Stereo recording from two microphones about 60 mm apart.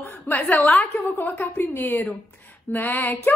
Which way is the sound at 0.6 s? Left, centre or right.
Left.